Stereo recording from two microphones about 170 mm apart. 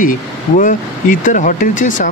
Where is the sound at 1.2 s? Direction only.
50° left (ahead or behind).